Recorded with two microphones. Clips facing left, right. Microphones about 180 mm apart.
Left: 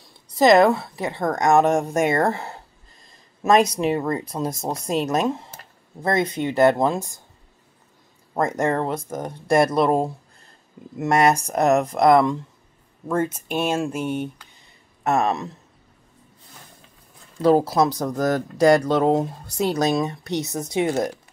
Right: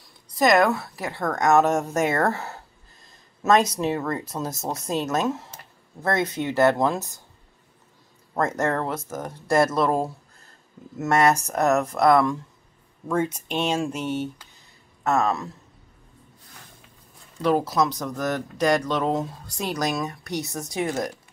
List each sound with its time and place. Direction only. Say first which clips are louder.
0.4 s a woman's voice: left 4 dB; 25° left (ahead or behind)
8.4 s a woman's voice: left 2 dB; 15° left (ahead or behind)
11.5 s a woman's voice: left 3 dB; 15° left (ahead or behind)
13.1 s speech: left 2 dB; 5° left (ahead or behind); by 15.5 s 20° left (ahead or behind)
17.4 s speech: left 4 dB; 30° left (ahead or behind)